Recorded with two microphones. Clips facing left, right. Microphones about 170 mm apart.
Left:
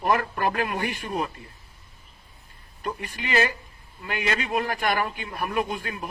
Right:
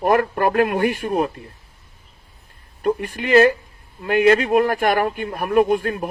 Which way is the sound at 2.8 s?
55° right (ahead or behind).